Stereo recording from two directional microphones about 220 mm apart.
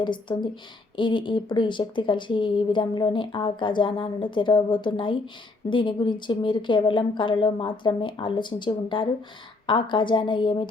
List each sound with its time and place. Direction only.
0.0 s speech: 20° left (ahead or behind)